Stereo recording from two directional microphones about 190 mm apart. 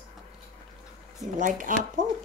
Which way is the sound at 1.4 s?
45° right (ahead or behind).